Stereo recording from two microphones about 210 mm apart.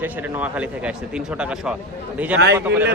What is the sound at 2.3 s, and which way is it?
Speech, 55° right (ahead or behind).